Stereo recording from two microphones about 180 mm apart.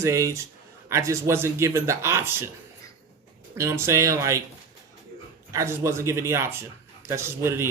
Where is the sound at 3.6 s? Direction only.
15° right (ahead or behind).